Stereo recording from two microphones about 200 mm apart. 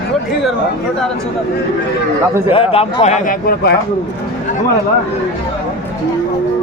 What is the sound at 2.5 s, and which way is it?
Speech, 30° left (ahead or behind).